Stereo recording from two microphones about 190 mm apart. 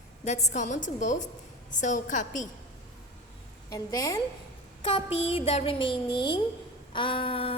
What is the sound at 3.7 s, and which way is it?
Speech, 20° left (ahead or behind).